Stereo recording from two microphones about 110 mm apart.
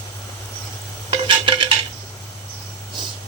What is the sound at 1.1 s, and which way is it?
Stir, 45° right (ahead or behind).